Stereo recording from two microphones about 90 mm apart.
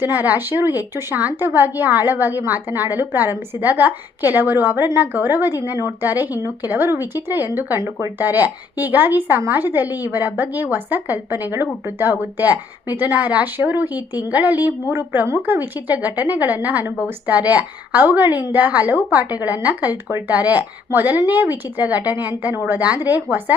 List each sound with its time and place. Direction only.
0.0 s a woman's voice: 20° right (ahead or behind)